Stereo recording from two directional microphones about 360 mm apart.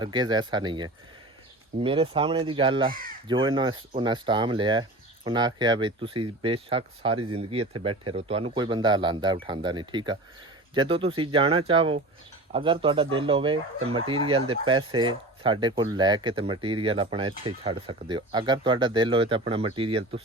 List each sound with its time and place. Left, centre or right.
0.0 s speech: centre